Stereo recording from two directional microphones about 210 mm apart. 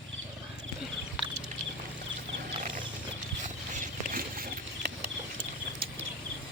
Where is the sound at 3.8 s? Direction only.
40° right (ahead or behind).